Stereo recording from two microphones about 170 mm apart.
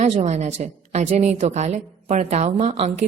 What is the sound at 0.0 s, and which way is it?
A woman's voice, 40° right (ahead or behind).